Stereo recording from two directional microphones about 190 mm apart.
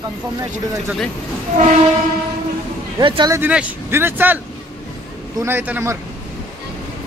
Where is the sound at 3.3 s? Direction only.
10° right (ahead or behind).